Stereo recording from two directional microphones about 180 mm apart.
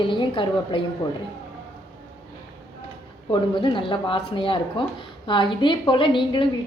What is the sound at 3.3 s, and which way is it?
A woman's voice, 25° left (ahead or behind).